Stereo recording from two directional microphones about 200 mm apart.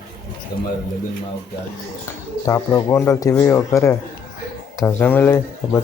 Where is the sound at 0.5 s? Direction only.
50° left (ahead or behind).